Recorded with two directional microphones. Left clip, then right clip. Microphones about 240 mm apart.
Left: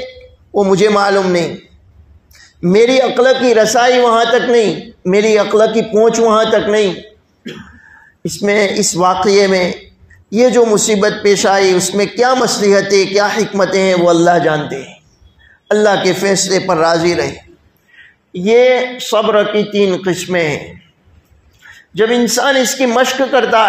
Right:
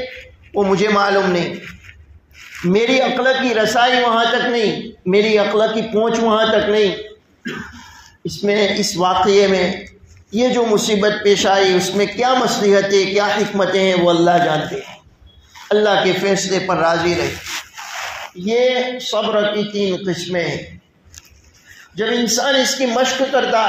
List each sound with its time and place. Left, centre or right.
0.6 s a man's voice: left
2.7 s a man's voice: left
8.3 s a man's voice: left
15.7 s a man's voice: left
18.4 s a man's voice: left
22.3 s a man's voice: left